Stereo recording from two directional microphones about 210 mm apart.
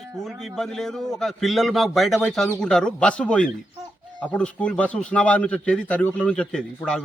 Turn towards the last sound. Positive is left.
turn(degrees=5)  # may be behind; listen again after turning